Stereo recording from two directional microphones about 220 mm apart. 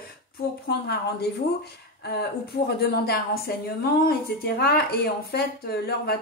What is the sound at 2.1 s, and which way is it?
Speech, 45° left (ahead or behind).